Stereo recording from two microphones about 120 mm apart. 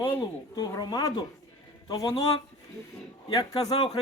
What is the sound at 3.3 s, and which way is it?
Speech, 35° left (ahead or behind).